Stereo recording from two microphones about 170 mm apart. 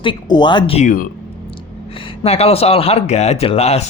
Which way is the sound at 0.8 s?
50° left (ahead or behind).